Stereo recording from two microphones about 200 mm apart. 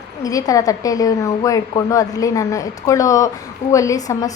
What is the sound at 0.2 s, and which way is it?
A woman's voice, 20° left (ahead or behind).